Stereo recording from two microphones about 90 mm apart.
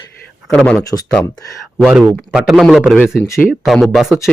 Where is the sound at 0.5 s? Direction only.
10° left (ahead or behind).